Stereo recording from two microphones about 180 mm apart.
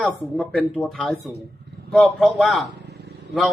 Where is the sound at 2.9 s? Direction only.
65° right (ahead or behind).